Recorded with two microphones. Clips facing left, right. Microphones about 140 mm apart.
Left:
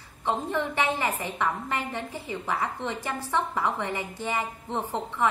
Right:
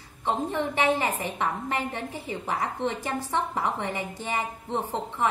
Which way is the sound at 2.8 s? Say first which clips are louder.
Right 3 dB; 20° right (ahead or behind).